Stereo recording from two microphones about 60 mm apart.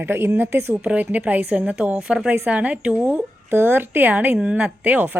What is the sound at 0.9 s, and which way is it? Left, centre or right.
A woman's voice, right.